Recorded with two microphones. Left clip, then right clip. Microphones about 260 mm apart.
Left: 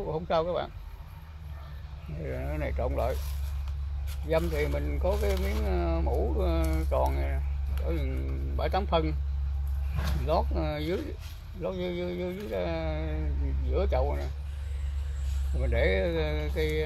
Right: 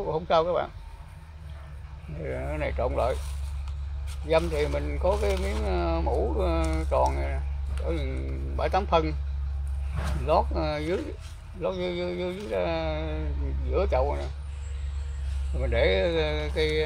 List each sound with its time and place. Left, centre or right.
0.0 s speech: centre
2.2 s speech: right
4.6 s speech: centre
5.3 s speech: centre
5.7 s speech: right
10.2 s speech: right
15.6 s speech: right